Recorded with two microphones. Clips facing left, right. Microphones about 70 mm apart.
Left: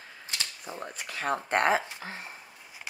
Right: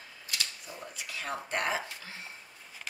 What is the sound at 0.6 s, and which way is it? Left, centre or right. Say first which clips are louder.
Speech: left 5 dB; left.